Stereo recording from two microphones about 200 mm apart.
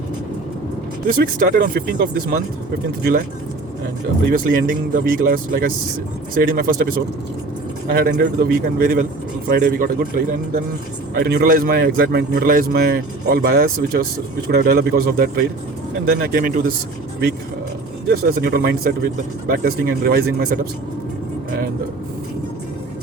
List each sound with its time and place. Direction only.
1.0 s speech: 45° right (ahead or behind)
4.3 s speech: 45° right (ahead or behind)
18.1 s speech: 50° right (ahead or behind)